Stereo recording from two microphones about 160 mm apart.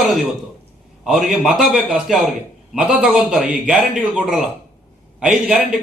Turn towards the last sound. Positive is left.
turn(degrees=-5)  # may be behind; listen again after turning